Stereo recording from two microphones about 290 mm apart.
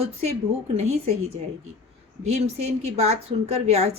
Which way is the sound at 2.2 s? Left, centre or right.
Right.